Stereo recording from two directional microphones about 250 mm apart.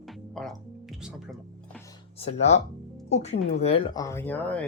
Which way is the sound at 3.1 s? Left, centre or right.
Left.